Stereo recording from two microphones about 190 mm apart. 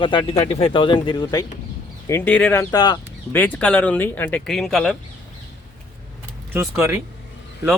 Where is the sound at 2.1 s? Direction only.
10° left (ahead or behind).